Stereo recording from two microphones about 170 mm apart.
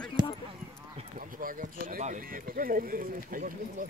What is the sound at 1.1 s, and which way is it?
Speech, 55° right (ahead or behind).